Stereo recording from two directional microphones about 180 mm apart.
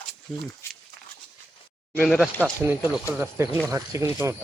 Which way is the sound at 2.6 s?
10° right (ahead or behind).